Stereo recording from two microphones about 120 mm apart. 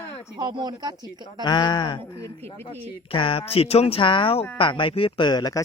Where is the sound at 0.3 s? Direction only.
40° right (ahead or behind).